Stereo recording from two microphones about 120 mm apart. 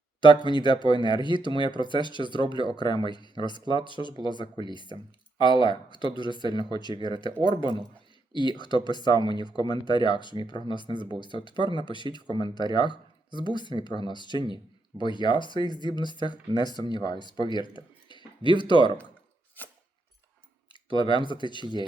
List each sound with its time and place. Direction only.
0.2 s speech: 40° left (ahead or behind)
19.6 s a sound: 15° left (ahead or behind)
21.2 s speech: 40° left (ahead or behind)